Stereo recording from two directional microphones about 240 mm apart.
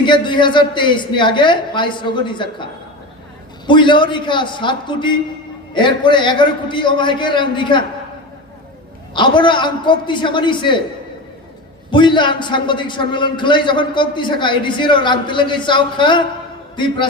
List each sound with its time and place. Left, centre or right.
0.0 s a man's voice: centre
3.7 s a man's voice: centre
9.1 s a man's voice: centre
11.9 s a man's voice: centre